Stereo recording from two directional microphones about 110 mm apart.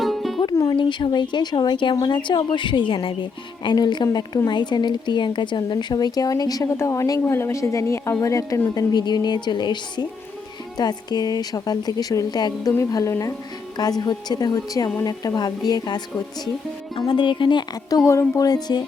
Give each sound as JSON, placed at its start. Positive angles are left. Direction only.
{"t": 0.0, "sound": "music", "side_deg": 0}
{"t": 0.7, "sound": "speech", "side_deg": 45}
{"t": 16.9, "sound": "speech", "side_deg": 50}